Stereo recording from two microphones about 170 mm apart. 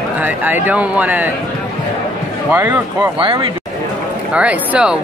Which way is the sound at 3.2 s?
30° right (ahead or behind).